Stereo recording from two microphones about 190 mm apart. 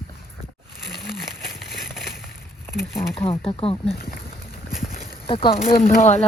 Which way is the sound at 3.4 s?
30° left (ahead or behind).